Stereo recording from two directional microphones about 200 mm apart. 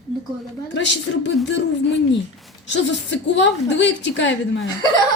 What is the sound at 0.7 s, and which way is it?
A woman's voice, 65° left (ahead or behind).